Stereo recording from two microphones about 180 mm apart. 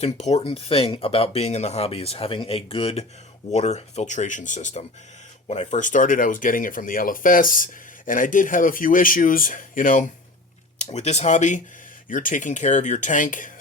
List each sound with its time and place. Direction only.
0.0 s speech: 40° left (ahead or behind)